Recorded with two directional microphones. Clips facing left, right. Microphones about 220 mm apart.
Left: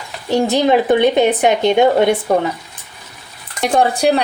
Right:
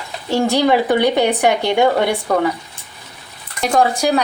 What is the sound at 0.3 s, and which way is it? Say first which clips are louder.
Speech: left 1 dB; 20° left (ahead or behind).